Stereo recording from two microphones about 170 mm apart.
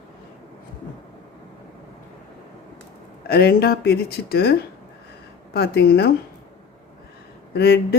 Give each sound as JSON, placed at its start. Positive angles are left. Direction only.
{"t": 3.2, "sound": "speech", "side_deg": 65}
{"t": 7.5, "sound": "speech", "side_deg": 70}